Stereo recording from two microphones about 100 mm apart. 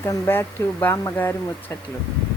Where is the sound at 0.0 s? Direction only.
25° left (ahead or behind).